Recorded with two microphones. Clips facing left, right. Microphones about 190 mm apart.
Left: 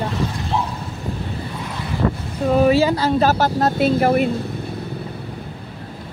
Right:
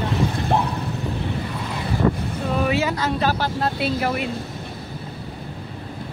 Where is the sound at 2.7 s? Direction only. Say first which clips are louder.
Left 6 dB; 35° left (ahead or behind).